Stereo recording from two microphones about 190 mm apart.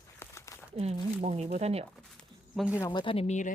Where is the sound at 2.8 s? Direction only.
25° left (ahead or behind).